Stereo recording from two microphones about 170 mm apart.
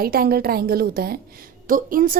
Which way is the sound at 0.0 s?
60° right (ahead or behind).